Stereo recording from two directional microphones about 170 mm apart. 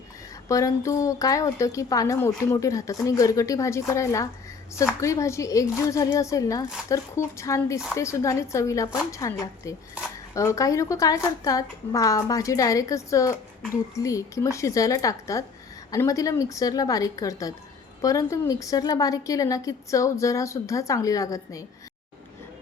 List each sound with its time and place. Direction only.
0.4 s a woman's voice: 20° left (ahead or behind)
10.0 s a sound: 10° right (ahead or behind)
10.3 s a woman's voice: 20° left (ahead or behind)